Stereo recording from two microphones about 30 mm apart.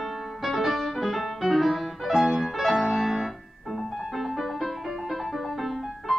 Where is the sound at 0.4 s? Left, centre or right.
Centre.